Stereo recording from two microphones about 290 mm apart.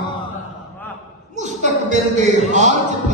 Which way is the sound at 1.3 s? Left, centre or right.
Right.